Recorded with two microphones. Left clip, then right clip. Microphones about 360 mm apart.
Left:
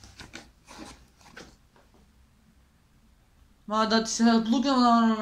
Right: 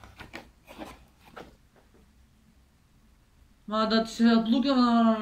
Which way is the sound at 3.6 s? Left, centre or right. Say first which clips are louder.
Left 1 dB; centre.